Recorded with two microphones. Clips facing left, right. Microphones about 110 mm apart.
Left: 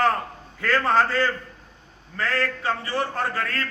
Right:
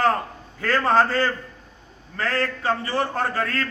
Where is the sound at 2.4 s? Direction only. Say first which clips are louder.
Right 2 dB; 30° right (ahead or behind).